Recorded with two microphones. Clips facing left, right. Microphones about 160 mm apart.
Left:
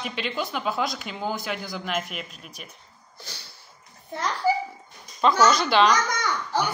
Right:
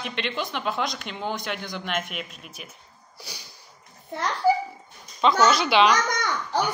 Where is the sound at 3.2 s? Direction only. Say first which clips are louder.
Right 1 dB; 10° right (ahead or behind).